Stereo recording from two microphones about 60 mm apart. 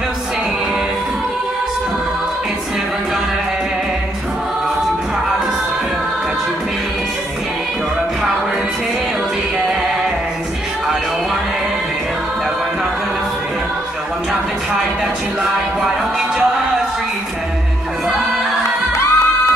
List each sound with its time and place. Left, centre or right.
18.6 s singing: left